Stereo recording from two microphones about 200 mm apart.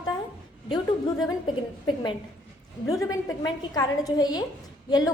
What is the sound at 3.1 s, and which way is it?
A woman's voice, 20° left (ahead or behind).